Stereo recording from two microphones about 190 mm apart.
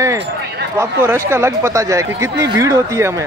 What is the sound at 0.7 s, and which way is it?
Speech, 15° right (ahead or behind).